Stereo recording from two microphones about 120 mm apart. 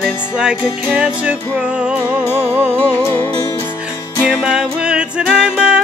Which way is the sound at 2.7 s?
20° left (ahead or behind).